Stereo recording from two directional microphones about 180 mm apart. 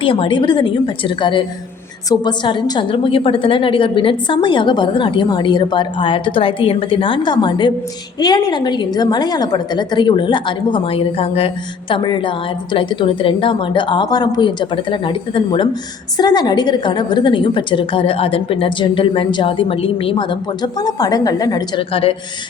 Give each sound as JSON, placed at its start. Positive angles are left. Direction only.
{"t": 0.0, "sound": "a woman's voice", "side_deg": 30}